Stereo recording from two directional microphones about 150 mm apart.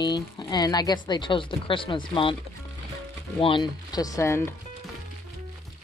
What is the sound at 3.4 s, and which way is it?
Speech, 30° left (ahead or behind).